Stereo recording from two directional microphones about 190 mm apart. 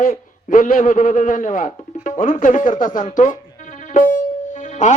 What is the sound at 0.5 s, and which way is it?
A man's voice, 45° left (ahead or behind).